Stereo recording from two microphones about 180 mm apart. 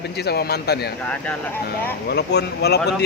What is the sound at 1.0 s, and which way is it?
Speech, 10° left (ahead or behind).